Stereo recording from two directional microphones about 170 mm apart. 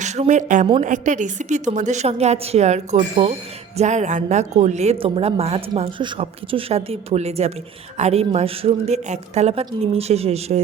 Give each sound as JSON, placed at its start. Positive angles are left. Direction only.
{"t": 0.0, "sound": "a woman's voice", "side_deg": -45}